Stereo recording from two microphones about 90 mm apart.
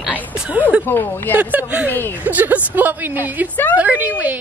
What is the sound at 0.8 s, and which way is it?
Speech, 25° left (ahead or behind).